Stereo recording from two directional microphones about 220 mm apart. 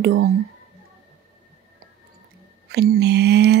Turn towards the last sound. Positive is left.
turn(degrees=-50)  # may be behind; listen again after turning